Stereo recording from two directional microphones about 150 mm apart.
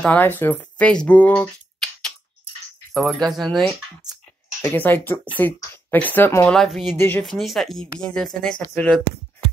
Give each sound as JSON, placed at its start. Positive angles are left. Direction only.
{"t": 0.0, "sound": "speech", "side_deg": 10}
{"t": 4.6, "sound": "speech", "side_deg": 15}
{"t": 6.5, "sound": "speech", "side_deg": 0}
{"t": 7.0, "sound": "speech", "side_deg": 15}
{"t": 7.2, "sound": "speech", "side_deg": 0}